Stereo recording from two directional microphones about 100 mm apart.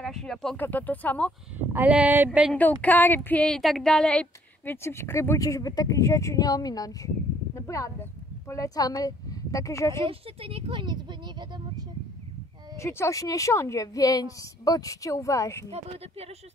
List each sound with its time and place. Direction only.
0.0 s speech: 5° left (ahead or behind)
0.6 s a woman's voice: 20° left (ahead or behind)
1.7 s speech: 15° right (ahead or behind)
2.5 s a woman's voice: 15° left (ahead or behind)
3.4 s a woman's voice: 5° left (ahead or behind)
4.8 s speech: 25° left (ahead or behind)
10.0 s speech: 70° right (ahead or behind); by 11.8 s 45° right (ahead or behind)
12.7 s speech: 30° left (ahead or behind)
15.7 s speech: 90° right